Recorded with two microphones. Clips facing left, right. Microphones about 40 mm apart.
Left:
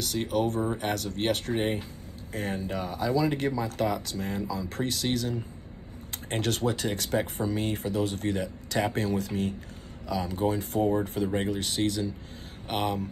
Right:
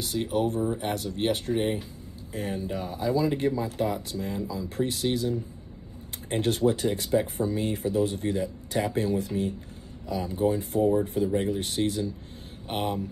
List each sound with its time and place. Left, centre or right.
0.2 s speech: left
1.2 s speech: left
1.5 s speech: left
2.3 s speech: left
11.2 s speech: left
11.5 s speech: left